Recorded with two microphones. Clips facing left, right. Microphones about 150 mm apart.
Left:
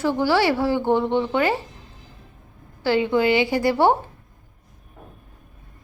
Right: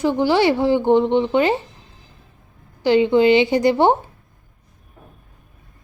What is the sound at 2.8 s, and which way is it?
A woman's voice, 20° right (ahead or behind).